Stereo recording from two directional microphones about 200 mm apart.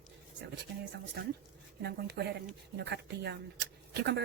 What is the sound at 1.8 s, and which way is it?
A woman's voice, 55° right (ahead or behind).